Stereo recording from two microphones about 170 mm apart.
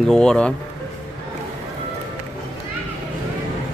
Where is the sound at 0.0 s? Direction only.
5° left (ahead or behind).